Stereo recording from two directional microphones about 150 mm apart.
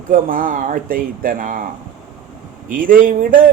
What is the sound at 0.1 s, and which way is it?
Speech, 70° right (ahead or behind).